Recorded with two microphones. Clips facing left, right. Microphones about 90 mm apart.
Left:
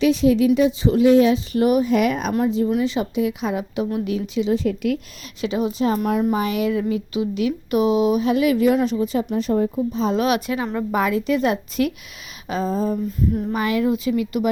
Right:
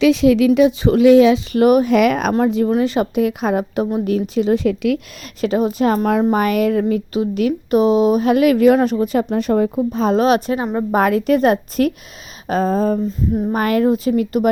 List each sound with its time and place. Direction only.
0.0 s a woman's voice: 90° right; by 2.7 s 65° right (ahead or behind)
2.7 s a woman's voice: 55° right (ahead or behind)
4.6 s a woman's voice: 90° right
5.4 s a woman's voice: 45° right (ahead or behind)
6.3 s a woman's voice: 55° right (ahead or behind)
7.7 s a woman's voice: 35° right (ahead or behind)
8.2 s a woman's voice: 60° right (ahead or behind)
10.2 s a woman's voice: 40° right (ahead or behind)
11.0 s a woman's voice: 55° right (ahead or behind)
13.1 s a sound: 20° right (ahead or behind)
13.5 s a woman's voice: 50° right (ahead or behind)